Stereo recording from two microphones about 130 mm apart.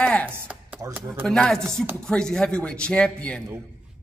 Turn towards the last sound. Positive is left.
turn(degrees=10)  # may be behind; listen again after turning